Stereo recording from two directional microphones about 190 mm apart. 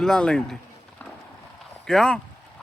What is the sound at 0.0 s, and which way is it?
Speech, 5° left (ahead or behind).